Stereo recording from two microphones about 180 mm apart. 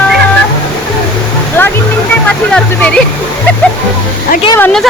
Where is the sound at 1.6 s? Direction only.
10° left (ahead or behind).